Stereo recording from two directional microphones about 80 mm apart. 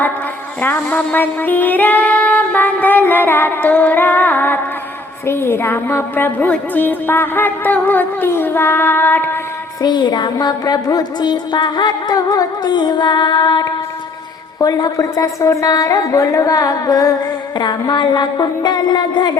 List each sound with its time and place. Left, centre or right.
0.6 s music: left
5.2 s a woman's voice: left
6.5 s music: left
9.8 s music: left
14.6 s a woman's voice: left
17.6 s music: left